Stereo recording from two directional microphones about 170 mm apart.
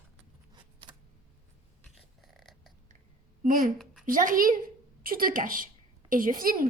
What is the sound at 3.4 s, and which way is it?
A woman's voice, 55° right (ahead or behind).